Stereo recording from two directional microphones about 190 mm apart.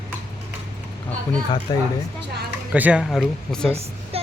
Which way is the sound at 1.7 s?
20° left (ahead or behind).